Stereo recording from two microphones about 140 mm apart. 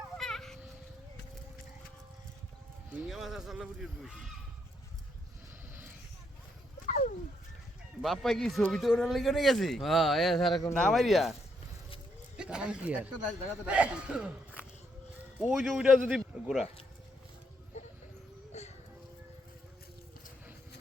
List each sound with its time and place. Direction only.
0.2 s a sound: centre (ahead or behind)
2.9 s speech: 5° right (ahead or behind)
6.8 s a sound: 60° left (ahead or behind)
8.0 s speech: centre (ahead or behind)
12.4 s speech: 5° right (ahead or behind)
18.5 s music: 55° left (ahead or behind)